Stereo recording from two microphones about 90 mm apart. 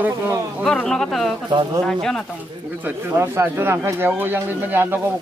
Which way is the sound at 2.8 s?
25° right (ahead or behind).